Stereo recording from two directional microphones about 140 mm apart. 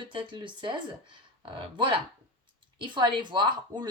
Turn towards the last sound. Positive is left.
turn(degrees=-35)  # may be behind; listen again after turning